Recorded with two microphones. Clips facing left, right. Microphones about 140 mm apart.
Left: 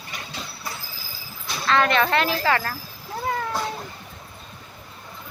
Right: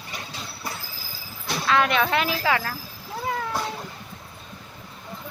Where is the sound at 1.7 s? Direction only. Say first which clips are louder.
Left 2 dB; 5° right (ahead or behind).